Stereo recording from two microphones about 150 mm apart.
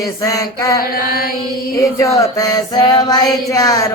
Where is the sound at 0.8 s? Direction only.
80° left.